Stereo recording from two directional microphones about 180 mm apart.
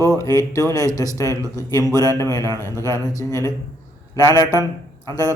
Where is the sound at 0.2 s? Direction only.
20° left (ahead or behind).